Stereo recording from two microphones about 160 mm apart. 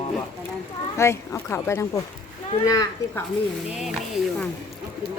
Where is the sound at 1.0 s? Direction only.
15° left (ahead or behind).